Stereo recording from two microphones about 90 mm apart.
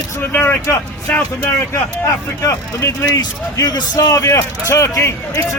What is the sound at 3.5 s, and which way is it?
Speech, 45° left (ahead or behind).